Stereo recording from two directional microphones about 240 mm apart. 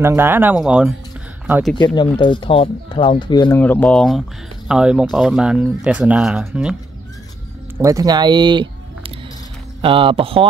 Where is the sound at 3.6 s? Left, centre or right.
Centre.